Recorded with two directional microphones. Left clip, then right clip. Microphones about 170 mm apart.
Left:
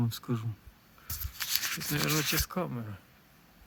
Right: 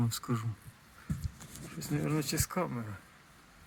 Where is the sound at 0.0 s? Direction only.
Centre (ahead or behind).